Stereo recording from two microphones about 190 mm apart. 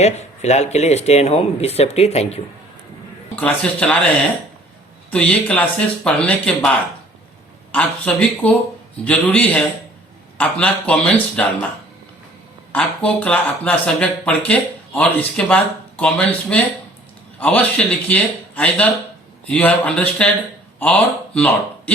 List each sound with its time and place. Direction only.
0.0 s speech: 35° left (ahead or behind)
3.4 s speech: 5° left (ahead or behind)
5.1 s speech: 5° left (ahead or behind)
7.7 s speech: 5° left (ahead or behind)
12.7 s speech: 5° left (ahead or behind)